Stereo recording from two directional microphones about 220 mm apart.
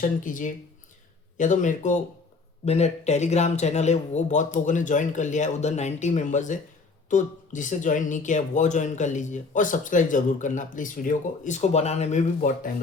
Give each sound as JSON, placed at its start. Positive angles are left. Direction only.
{"t": 0.0, "sound": "speech", "side_deg": 35}